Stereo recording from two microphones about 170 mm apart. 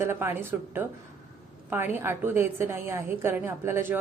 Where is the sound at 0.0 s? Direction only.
15° right (ahead or behind).